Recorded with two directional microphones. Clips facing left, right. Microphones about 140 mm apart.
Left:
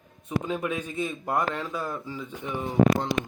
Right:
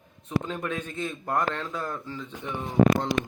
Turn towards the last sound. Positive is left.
turn(degrees=5)  # may be behind; listen again after turning